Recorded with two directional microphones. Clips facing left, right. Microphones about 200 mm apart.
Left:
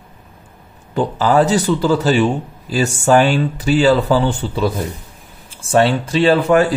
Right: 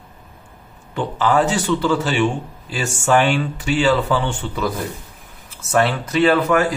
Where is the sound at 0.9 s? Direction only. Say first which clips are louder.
Left 4 dB; 35° left (ahead or behind).